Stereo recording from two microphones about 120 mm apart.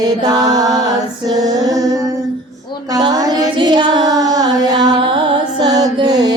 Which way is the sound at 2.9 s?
30° right (ahead or behind).